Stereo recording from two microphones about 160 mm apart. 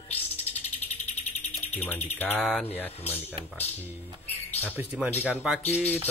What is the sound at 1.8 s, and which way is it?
Speech, 10° left (ahead or behind).